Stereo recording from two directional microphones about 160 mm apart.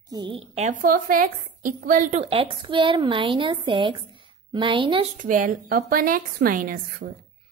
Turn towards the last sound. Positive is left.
turn(degrees=-60)  # may be behind; listen again after turning